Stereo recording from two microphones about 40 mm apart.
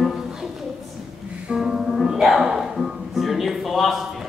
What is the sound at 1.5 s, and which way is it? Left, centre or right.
Music, centre.